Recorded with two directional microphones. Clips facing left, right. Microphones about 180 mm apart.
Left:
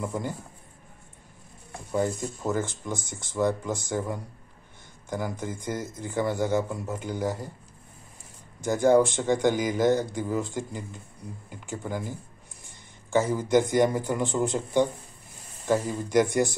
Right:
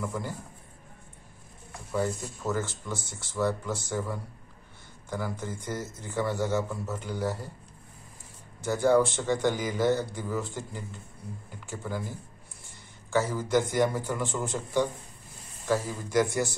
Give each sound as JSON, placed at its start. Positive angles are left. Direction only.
{"t": 0.0, "sound": "a man's voice", "side_deg": 20}
{"t": 2.5, "sound": "speech", "side_deg": 15}
{"t": 8.5, "sound": "speech", "side_deg": 15}